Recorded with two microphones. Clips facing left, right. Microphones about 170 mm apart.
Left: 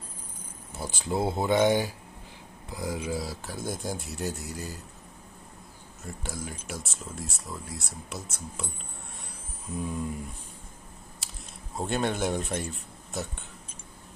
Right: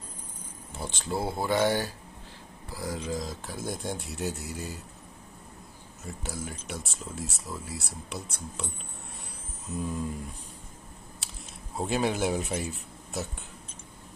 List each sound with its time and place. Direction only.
0.7 s speech: 10° left (ahead or behind)
1.1 s speech: 20° left (ahead or behind); by 4.8 s centre (ahead or behind)
6.0 s speech: centre (ahead or behind)
9.7 s speech: centre (ahead or behind)
11.2 s a sound: centre (ahead or behind)
11.7 s speech: centre (ahead or behind)